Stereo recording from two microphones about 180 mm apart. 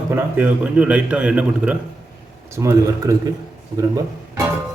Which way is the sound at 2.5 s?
15° right (ahead or behind).